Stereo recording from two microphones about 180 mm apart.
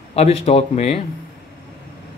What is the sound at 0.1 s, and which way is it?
Speech, 35° left (ahead or behind).